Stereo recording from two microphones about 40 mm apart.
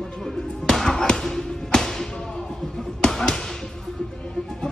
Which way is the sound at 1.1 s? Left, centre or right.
Centre.